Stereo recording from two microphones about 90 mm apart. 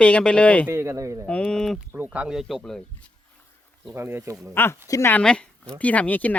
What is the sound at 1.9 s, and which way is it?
Speech, 15° right (ahead or behind).